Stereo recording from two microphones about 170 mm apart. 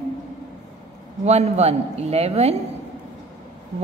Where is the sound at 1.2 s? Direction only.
40° right (ahead or behind).